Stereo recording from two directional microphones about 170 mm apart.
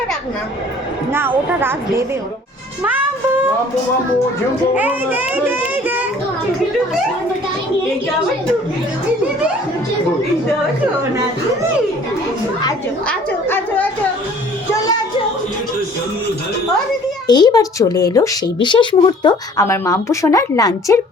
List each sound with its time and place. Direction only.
1.1 s a child's voice: 10° right (ahead or behind)
4.7 s a child's voice: 10° right (ahead or behind)
13.1 s a woman's voice: 10° left (ahead or behind)
17.2 s speech: 25° left (ahead or behind)